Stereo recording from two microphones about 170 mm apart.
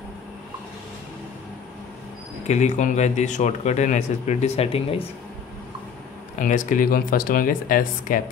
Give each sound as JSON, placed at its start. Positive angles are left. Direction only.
{"t": 2.4, "sound": "speech", "side_deg": 45}
{"t": 6.3, "sound": "speech", "side_deg": 50}